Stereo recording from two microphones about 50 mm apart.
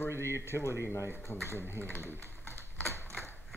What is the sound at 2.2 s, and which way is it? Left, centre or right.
Typewriter, left.